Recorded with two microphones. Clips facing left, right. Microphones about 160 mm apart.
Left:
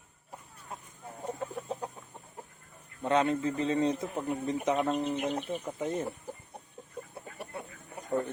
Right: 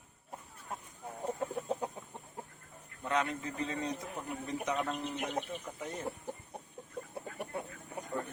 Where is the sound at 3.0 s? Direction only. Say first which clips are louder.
Left 7 dB; 25° left (ahead or behind).